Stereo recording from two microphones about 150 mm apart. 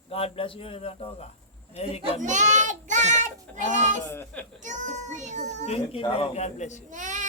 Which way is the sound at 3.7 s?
55° right (ahead or behind).